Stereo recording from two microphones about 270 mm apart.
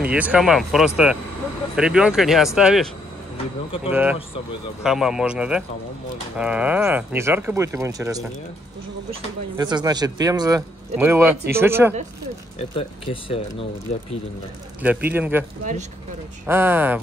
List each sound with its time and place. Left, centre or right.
0.0 s speech: centre
3.9 s speech: centre
9.6 s speech: centre
12.5 s speech: centre
14.8 s speech: centre
16.4 s speech: centre